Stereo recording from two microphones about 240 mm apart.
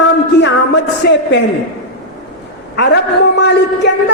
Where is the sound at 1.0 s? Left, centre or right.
Left.